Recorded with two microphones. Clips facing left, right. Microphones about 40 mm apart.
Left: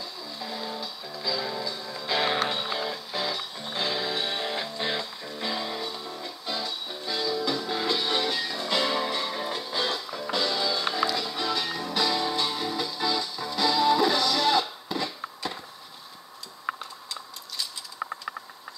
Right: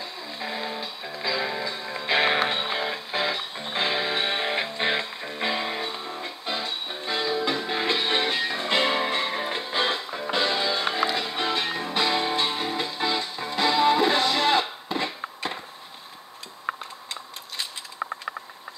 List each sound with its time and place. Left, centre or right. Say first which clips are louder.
0.0 s music: right 3 dB; right